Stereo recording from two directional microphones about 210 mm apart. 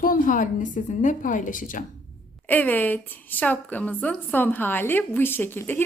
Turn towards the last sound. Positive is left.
turn(degrees=10)  # may be behind; listen again after turning